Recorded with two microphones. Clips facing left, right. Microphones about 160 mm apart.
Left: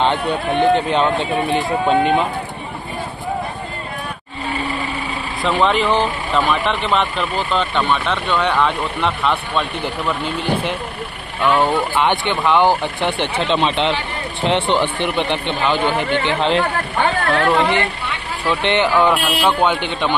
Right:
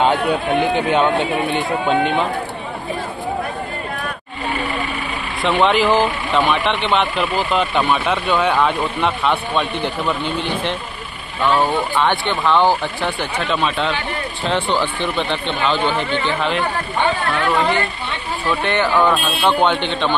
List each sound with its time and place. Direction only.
0.3 s speech: 5° right (ahead or behind)
5.4 s speech: centre (ahead or behind)
16.3 s speech: 35° left (ahead or behind)
18.5 s speech: 20° left (ahead or behind)